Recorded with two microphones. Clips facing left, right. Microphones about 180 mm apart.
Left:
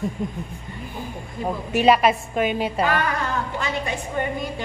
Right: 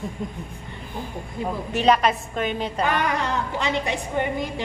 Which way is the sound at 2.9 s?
20° right (ahead or behind).